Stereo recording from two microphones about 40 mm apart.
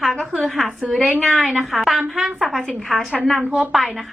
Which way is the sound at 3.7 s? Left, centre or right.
Centre.